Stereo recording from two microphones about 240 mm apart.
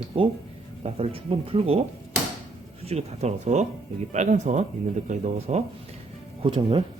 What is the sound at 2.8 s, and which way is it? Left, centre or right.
Speech, right.